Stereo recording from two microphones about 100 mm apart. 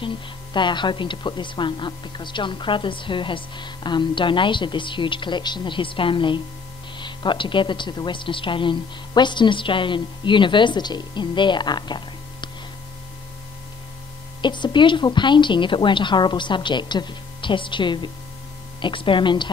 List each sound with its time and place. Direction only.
0.0 s speech: 50° left (ahead or behind)
14.4 s speech: 50° left (ahead or behind)